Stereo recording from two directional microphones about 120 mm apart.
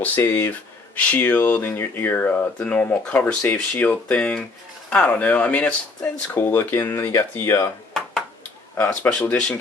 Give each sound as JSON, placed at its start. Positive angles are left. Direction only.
{"t": 0.0, "sound": "speech", "side_deg": 15}
{"t": 8.8, "sound": "speech", "side_deg": 15}